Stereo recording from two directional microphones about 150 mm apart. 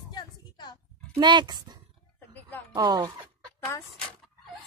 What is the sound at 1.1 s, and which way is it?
Speech, 30° right (ahead or behind).